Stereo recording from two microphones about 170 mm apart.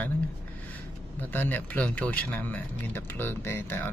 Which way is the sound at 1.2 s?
10° left (ahead or behind).